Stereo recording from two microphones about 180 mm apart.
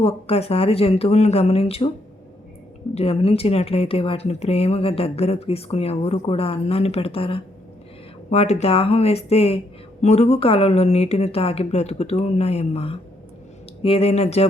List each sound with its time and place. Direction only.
0.0 s speech: 35° left (ahead or behind)
2.9 s speech: 35° left (ahead or behind)